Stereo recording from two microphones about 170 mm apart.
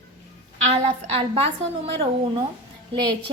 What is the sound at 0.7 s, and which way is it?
Speech, 35° right (ahead or behind).